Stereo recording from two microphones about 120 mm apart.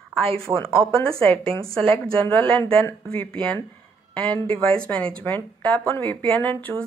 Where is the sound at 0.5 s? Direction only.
20° right (ahead or behind).